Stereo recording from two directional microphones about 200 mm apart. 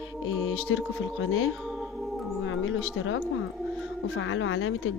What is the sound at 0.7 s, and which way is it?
Speech, 75° left (ahead or behind).